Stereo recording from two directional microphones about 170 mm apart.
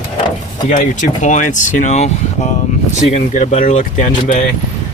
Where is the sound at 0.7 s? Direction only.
45° left (ahead or behind).